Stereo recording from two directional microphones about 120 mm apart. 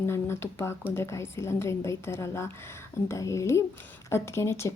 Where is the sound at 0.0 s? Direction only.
20° left (ahead or behind).